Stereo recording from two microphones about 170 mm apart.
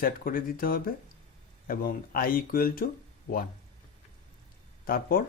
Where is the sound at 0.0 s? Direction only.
55° left (ahead or behind).